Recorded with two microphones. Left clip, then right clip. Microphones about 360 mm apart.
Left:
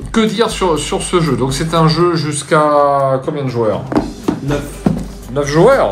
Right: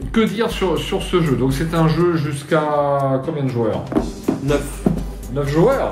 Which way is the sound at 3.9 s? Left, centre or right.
Centre.